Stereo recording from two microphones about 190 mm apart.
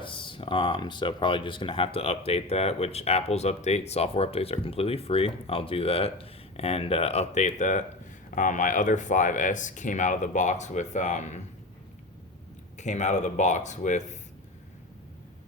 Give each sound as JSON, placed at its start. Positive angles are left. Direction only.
{"t": 0.0, "sound": "speech", "side_deg": 25}
{"t": 12.7, "sound": "speech", "side_deg": 40}